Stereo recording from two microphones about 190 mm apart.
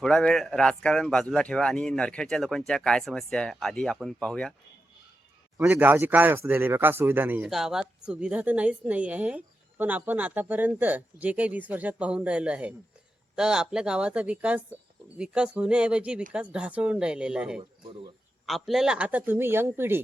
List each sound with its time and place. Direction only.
0.0 s speech: 5° left (ahead or behind)
5.5 s a woman's voice: 10° right (ahead or behind)
17.6 s speech: 25° right (ahead or behind)
18.4 s a woman's voice: centre (ahead or behind)